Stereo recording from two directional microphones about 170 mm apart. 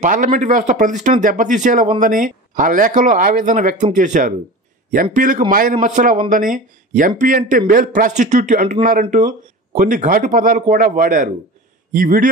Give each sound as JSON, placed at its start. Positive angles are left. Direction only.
{"t": 0.0, "sound": "speech", "side_deg": -50}